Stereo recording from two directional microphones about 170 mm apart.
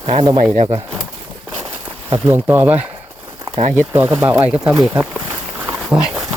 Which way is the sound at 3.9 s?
15° right (ahead or behind).